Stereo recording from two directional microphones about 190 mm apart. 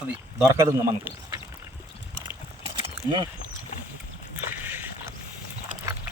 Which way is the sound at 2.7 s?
25° right (ahead or behind).